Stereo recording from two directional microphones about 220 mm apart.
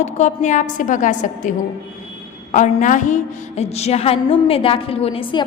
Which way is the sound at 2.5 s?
35° left (ahead or behind).